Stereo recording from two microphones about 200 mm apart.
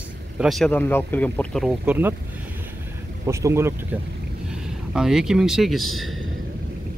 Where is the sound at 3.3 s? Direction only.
15° right (ahead or behind).